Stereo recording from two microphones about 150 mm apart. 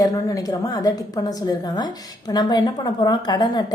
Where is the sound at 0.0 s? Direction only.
25° left (ahead or behind).